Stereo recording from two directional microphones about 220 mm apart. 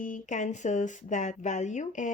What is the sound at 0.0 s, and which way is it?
Speech, 35° left (ahead or behind).